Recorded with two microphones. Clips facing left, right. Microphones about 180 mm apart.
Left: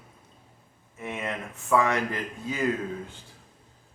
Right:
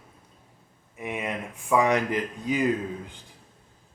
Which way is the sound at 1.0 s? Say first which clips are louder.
Right 2 dB; 15° right (ahead or behind).